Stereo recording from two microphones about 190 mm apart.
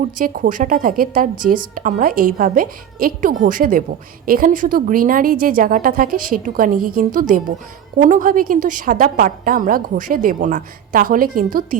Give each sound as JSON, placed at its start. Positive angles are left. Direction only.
{"t": 0.0, "sound": "a woman's voice", "side_deg": -45}